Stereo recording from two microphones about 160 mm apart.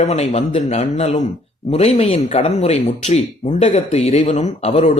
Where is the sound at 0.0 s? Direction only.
40° left (ahead or behind).